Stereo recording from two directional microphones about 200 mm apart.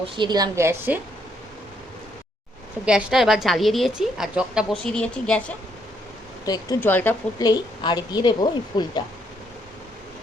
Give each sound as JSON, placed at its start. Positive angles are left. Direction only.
{"t": 0.0, "sound": "a woman's voice", "side_deg": -20}
{"t": 2.8, "sound": "a woman's voice", "side_deg": -5}
{"t": 6.4, "sound": "a woman's voice", "side_deg": 20}